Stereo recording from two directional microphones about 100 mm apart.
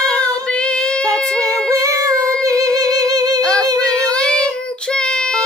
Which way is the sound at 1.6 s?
30° right (ahead or behind).